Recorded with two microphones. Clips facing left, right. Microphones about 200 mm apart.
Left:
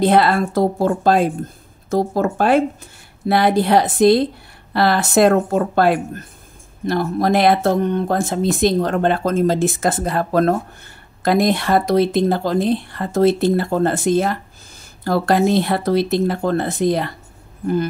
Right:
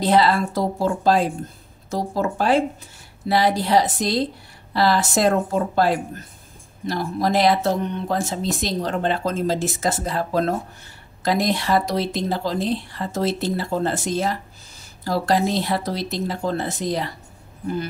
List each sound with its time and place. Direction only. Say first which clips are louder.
0.0 s a woman's voice: left 3 dB; 55° left (ahead or behind)